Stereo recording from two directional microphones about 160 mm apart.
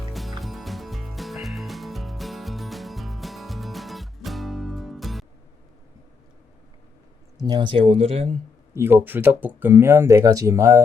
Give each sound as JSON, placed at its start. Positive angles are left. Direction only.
{"t": 0.1, "sound": "music", "side_deg": 0}
{"t": 7.3, "sound": "speech", "side_deg": -25}
{"t": 8.7, "sound": "speech", "side_deg": -15}